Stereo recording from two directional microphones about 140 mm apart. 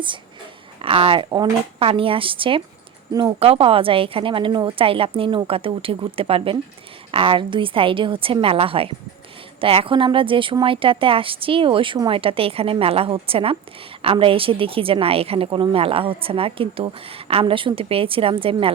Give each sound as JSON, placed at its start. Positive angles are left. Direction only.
{"t": 0.8, "sound": "a woman's voice", "side_deg": -40}
{"t": 3.1, "sound": "speech", "side_deg": -25}
{"t": 3.4, "sound": "a woman's voice", "side_deg": -40}